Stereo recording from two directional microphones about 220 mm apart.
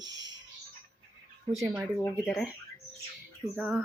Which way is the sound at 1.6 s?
5° right (ahead or behind).